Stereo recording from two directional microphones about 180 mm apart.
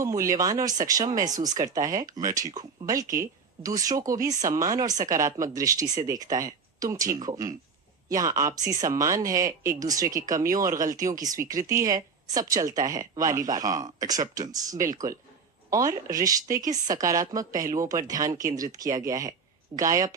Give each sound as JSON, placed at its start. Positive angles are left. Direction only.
{"t": 0.0, "sound": "speech", "side_deg": -15}